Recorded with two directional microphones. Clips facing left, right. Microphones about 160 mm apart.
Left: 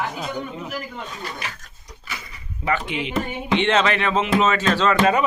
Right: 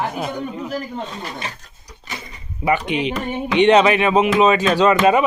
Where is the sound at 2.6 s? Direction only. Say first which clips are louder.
Right 5 dB; 15° right (ahead or behind).